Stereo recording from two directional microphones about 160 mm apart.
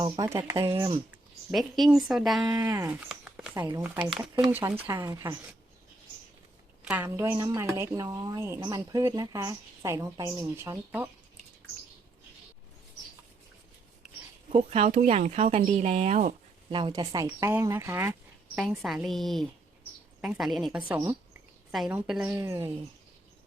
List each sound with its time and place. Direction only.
0.2 s a woman's voice: 20° right (ahead or behind)
1.5 s a woman's voice: centre (ahead or behind)
2.5 s a woman's voice: 20° right (ahead or behind)
3.1 s a sound: 5° right (ahead or behind)
3.5 s a woman's voice: 20° right (ahead or behind)
4.4 s a woman's voice: 5° right (ahead or behind)
4.8 s a woman's voice: 15° right (ahead or behind)
6.8 s a woman's voice: 10° right (ahead or behind)
14.5 s speech: 40° right (ahead or behind)
16.6 s a woman's voice: 30° right (ahead or behind)
18.5 s a woman's voice: 5° right (ahead or behind)
22.3 s a woman's voice: 15° right (ahead or behind)